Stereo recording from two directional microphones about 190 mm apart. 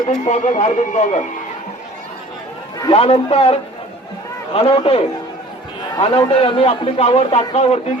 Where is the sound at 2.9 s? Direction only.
30° left (ahead or behind).